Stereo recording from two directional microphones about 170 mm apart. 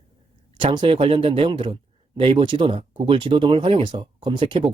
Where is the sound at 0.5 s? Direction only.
30° right (ahead or behind).